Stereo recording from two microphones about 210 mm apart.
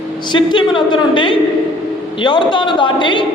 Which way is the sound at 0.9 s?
25° left (ahead or behind).